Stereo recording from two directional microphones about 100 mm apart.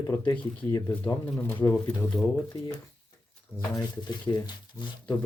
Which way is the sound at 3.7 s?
45° left (ahead or behind).